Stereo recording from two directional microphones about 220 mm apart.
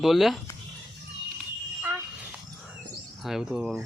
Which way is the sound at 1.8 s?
10° right (ahead or behind).